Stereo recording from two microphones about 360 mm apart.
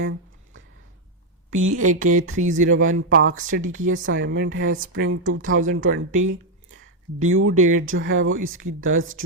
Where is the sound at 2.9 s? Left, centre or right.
Right.